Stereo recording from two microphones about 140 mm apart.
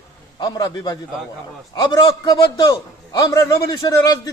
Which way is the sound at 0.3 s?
30° left (ahead or behind).